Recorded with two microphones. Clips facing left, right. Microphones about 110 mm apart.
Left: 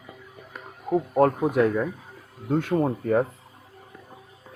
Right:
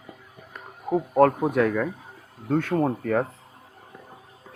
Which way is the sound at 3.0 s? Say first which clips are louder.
Left 2 dB; 25° left (ahead or behind).